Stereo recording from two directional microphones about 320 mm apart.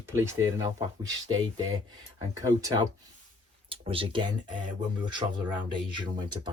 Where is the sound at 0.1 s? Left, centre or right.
Centre.